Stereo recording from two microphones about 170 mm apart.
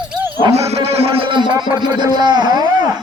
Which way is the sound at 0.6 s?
35° right (ahead or behind).